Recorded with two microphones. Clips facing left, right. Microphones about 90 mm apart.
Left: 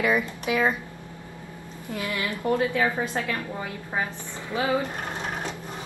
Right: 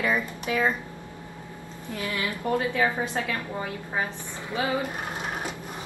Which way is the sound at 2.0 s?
15° left (ahead or behind).